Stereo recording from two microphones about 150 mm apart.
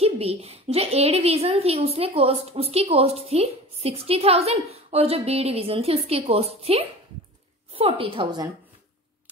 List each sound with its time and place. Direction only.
0.0 s a woman's voice: 40° right (ahead or behind)